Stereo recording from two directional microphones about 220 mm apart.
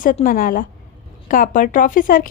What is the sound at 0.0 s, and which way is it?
A woman's voice, 40° left (ahead or behind).